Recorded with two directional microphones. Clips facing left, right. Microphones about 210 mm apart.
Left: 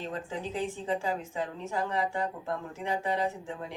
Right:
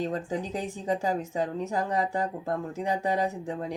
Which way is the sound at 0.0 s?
40° right (ahead or behind).